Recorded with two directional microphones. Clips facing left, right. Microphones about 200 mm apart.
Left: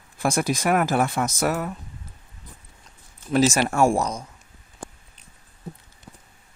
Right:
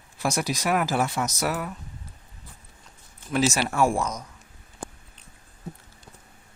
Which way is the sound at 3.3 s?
45° left (ahead or behind).